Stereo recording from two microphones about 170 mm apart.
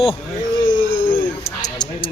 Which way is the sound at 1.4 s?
20° left (ahead or behind).